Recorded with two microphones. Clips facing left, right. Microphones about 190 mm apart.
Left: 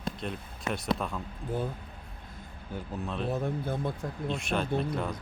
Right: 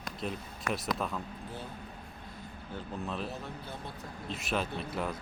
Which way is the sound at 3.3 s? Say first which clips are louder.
Left 10 dB; 50° left (ahead or behind).